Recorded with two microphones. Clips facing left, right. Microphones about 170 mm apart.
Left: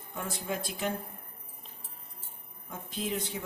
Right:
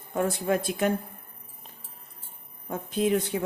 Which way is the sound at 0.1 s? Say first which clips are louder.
Right 10 dB; 60° right (ahead or behind).